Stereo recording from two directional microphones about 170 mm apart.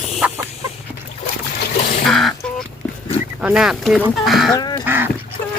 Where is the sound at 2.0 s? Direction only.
Centre (ahead or behind).